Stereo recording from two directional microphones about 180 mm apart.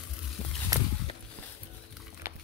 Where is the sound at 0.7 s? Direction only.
20° right (ahead or behind).